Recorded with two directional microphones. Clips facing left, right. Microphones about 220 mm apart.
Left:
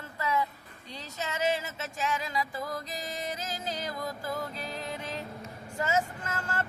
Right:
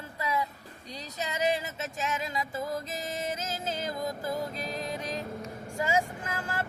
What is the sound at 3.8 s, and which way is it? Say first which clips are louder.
Music: right 3 dB; 20° right (ahead or behind).